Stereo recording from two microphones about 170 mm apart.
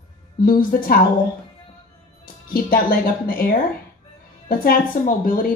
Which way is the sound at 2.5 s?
60° left (ahead or behind).